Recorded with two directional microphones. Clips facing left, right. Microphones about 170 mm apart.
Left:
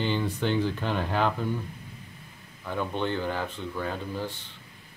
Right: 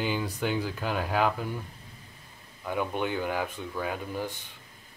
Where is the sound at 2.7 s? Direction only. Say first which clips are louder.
Even; 10° right (ahead or behind).